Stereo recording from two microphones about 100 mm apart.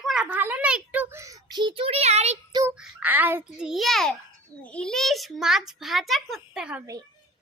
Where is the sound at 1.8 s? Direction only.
90° right.